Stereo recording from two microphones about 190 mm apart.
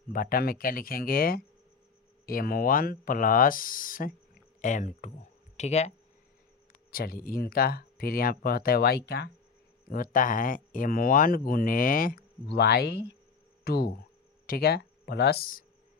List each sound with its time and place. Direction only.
0.1 s speech: 50° left (ahead or behind)
6.9 s speech: 50° left (ahead or behind)
9.9 s speech: 45° left (ahead or behind)